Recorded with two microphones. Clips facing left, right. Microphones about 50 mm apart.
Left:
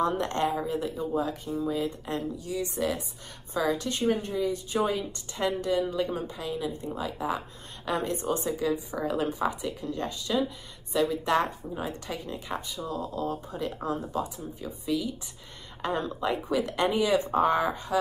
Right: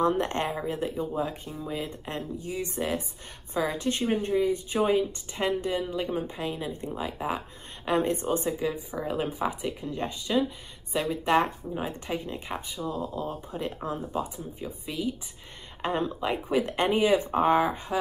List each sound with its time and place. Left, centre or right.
0.2 s speech: right
6.3 s speech: right